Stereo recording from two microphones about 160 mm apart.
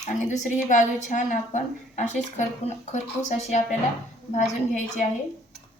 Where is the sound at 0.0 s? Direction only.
50° left (ahead or behind).